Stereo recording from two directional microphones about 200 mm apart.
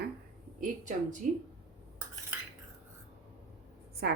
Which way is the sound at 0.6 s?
40° right (ahead or behind).